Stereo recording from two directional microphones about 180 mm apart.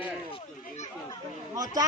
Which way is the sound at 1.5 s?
20° right (ahead or behind).